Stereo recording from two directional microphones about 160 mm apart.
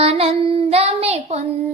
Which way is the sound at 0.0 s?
40° right (ahead or behind).